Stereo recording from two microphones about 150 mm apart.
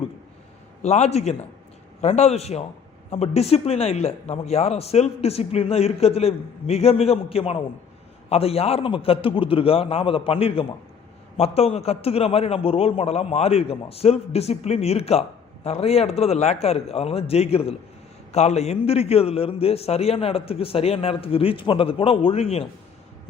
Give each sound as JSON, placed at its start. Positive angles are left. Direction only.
{"t": 0.8, "sound": "a man's voice", "side_deg": 45}